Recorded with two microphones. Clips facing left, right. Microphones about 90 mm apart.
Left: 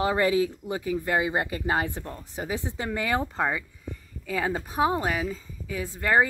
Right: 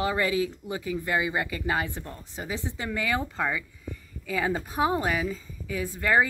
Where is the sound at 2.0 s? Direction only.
20° left (ahead or behind).